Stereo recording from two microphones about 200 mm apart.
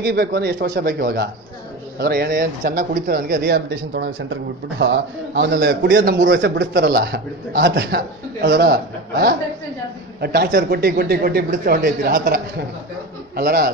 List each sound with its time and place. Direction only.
0.0 s a man's voice: 50° right (ahead or behind)
13.4 s a man's voice: 50° right (ahead or behind)